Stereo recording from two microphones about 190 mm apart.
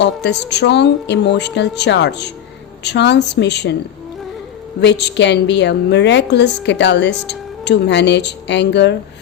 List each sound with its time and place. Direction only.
0.0 s a woman's voice: 65° left (ahead or behind)
4.8 s a woman's voice: 65° left (ahead or behind)